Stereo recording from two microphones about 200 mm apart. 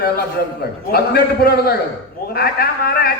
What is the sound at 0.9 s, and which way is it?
A man's voice, 50° left (ahead or behind).